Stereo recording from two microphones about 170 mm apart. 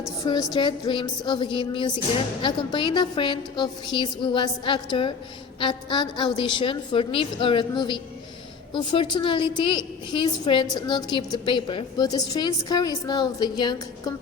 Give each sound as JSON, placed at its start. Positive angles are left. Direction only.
{"t": 0.3, "sound": "a woman's voice", "side_deg": 25}